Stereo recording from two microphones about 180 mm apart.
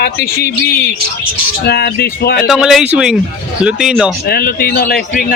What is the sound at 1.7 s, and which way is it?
Speech, 60° left (ahead or behind).